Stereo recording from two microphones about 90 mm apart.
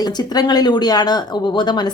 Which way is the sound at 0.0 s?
50° left (ahead or behind).